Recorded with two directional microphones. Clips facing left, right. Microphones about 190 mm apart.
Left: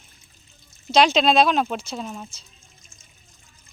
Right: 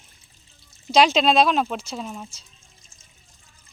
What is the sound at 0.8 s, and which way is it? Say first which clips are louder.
Speech: even; 5° right (ahead or behind).